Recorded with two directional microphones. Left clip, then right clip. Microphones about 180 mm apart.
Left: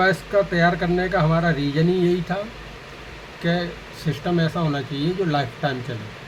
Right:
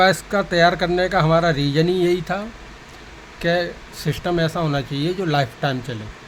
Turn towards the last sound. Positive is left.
turn(degrees=-65)  # may be behind; listen again after turning